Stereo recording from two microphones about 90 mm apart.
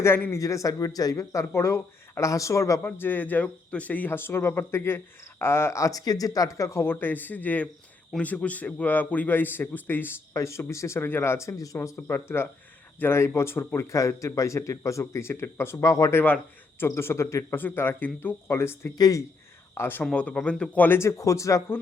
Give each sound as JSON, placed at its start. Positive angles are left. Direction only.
{"t": 0.0, "sound": "speech", "side_deg": 30}
{"t": 10.3, "sound": "speech", "side_deg": 35}
{"t": 16.1, "sound": "speech", "side_deg": 20}
{"t": 18.9, "sound": "speech", "side_deg": 45}
{"t": 19.7, "sound": "speech", "side_deg": 25}
{"t": 20.1, "sound": "speech", "side_deg": 15}